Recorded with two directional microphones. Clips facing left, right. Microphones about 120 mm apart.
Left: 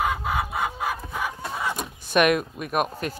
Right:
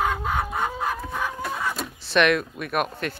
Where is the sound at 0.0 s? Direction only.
5° left (ahead or behind).